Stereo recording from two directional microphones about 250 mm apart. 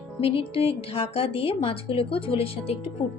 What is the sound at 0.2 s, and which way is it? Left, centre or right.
A woman's voice, left.